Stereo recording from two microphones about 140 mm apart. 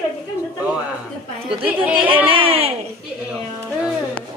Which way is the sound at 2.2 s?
40° right (ahead or behind).